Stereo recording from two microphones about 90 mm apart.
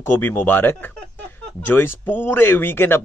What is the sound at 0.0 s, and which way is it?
Speech, 25° left (ahead or behind).